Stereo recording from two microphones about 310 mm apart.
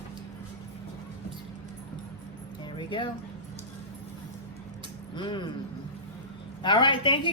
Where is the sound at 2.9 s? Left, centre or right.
Centre.